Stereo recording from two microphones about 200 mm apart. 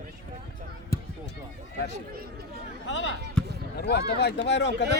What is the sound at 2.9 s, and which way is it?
Speech, 65° left (ahead or behind).